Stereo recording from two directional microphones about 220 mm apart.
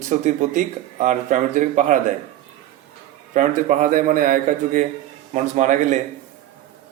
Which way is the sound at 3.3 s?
35° right (ahead or behind).